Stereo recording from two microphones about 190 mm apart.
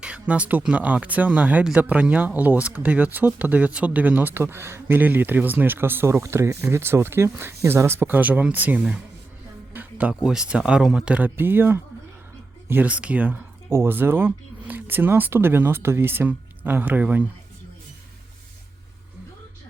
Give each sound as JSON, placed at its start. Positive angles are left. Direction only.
{"t": 0.0, "sound": "speech", "side_deg": -5}
{"t": 9.7, "sound": "music", "side_deg": -5}
{"t": 10.2, "sound": "speech", "side_deg": -5}